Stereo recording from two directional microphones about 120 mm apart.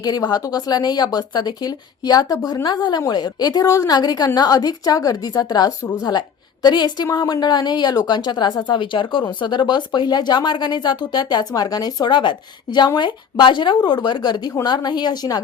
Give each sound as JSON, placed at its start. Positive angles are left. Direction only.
{"t": 0.0, "sound": "a woman's voice", "side_deg": 35}